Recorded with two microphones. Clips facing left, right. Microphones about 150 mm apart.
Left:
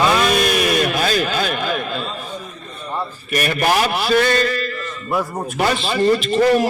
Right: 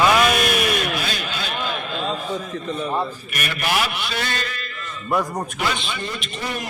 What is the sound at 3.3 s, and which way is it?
Speech, 40° left (ahead or behind).